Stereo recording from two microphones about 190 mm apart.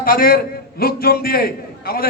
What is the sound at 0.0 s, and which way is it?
A man's voice, 50° left (ahead or behind).